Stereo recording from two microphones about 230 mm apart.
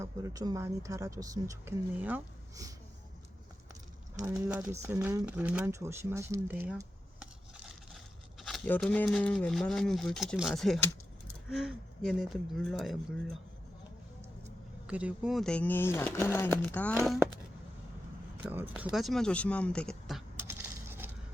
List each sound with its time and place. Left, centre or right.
0.0 s speech: centre
4.4 s speech: centre
14.8 s speech: centre
18.4 s speech: centre